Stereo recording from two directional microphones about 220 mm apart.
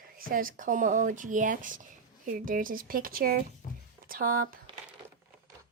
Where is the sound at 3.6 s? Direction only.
40° left (ahead or behind).